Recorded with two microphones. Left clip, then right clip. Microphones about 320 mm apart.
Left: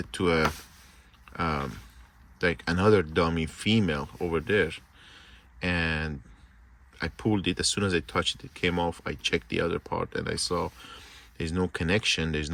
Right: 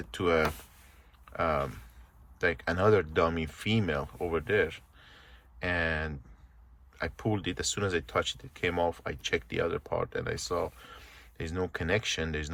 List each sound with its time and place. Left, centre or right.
0.0 s speech: centre